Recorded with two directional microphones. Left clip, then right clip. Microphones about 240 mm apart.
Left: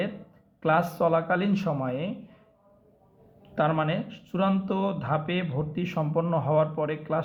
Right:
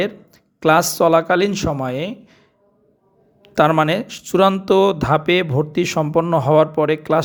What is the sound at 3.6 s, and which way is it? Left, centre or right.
Speech, right.